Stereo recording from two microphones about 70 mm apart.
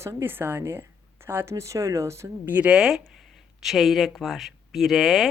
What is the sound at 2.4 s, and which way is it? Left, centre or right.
Speech, right.